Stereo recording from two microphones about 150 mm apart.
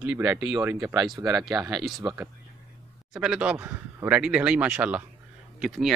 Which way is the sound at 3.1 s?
5° right (ahead or behind).